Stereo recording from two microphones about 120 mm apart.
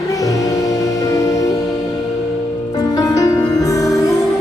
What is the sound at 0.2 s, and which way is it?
Music, 30° left (ahead or behind).